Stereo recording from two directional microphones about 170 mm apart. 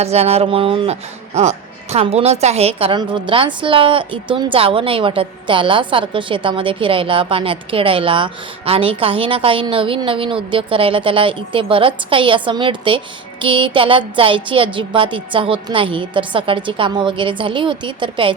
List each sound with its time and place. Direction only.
0.0 s speech: 40° right (ahead or behind)